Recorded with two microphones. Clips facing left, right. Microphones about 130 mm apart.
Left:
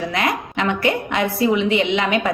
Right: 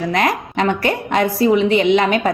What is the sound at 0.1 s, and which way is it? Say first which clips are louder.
A woman's voice: right 4 dB; 45° right (ahead or behind).